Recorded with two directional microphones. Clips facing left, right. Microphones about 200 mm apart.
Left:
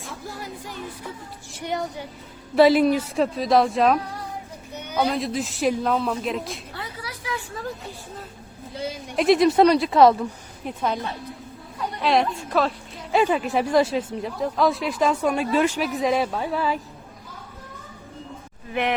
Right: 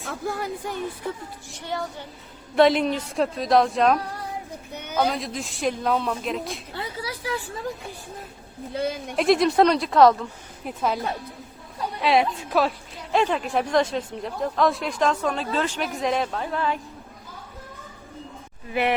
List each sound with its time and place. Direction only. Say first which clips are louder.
0.0 s music: right 6 dB; 55° right (ahead or behind)
1.6 s a woman's voice: left 3 dB; 15° left (ahead or behind)
2.6 s a woman's voice: left 3 dB; 5° left (ahead or behind)
6.7 s a sound: right 3 dB; 30° right (ahead or behind)
8.7 s speech: right 4 dB; 60° right (ahead or behind)
9.1 s a woman's voice: left 2 dB; centre (ahead or behind)
18.7 s speech: right 1 dB; 5° right (ahead or behind)